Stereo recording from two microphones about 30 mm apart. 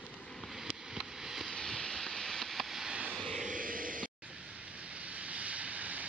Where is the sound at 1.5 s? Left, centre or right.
Centre.